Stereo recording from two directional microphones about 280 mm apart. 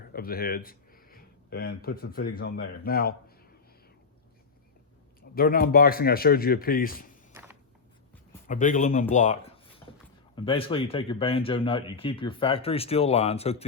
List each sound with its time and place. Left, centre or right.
0.1 s speech: left
5.3 s speech: left
8.4 s speech: left